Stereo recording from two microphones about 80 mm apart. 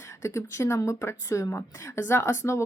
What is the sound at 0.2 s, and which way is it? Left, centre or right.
Speech, left.